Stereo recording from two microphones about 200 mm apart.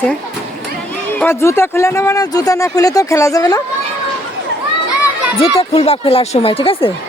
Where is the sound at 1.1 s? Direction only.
10° left (ahead or behind).